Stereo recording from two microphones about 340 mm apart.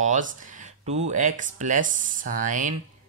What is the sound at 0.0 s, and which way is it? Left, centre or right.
Speech, right.